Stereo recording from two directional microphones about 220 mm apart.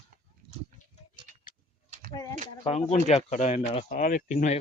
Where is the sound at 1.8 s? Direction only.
35° right (ahead or behind).